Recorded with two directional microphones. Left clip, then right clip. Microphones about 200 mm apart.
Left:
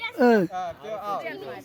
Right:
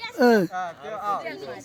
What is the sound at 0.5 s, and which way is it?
Speech, 45° left (ahead or behind).